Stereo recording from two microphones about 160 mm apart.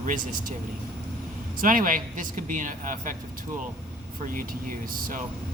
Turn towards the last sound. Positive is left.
turn(degrees=-55)  # may be behind; listen again after turning